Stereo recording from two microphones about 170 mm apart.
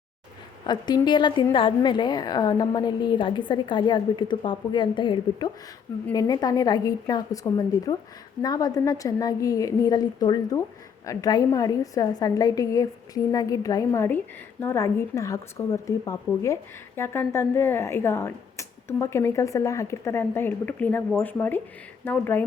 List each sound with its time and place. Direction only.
0.7 s a woman's voice: 25° left (ahead or behind)